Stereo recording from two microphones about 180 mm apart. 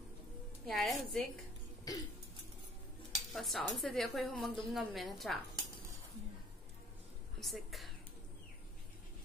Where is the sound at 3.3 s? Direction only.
Centre (ahead or behind).